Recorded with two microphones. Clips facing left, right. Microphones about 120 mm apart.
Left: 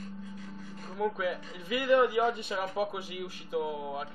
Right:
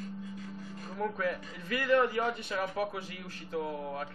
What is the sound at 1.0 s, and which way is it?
A man's voice, 10° left (ahead or behind).